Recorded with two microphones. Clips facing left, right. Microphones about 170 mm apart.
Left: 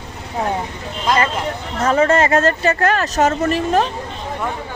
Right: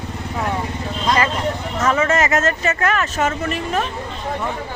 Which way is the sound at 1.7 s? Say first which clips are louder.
Left 4 dB; 30° left (ahead or behind).